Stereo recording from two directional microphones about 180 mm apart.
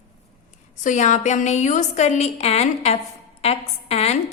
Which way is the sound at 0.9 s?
40° left (ahead or behind).